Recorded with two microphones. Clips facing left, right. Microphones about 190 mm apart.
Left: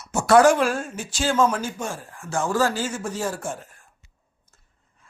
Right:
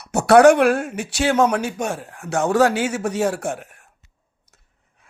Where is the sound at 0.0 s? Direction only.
65° right (ahead or behind).